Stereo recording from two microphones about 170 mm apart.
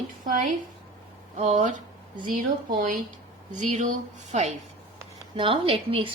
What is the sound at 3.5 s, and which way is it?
Speech, 45° right (ahead or behind).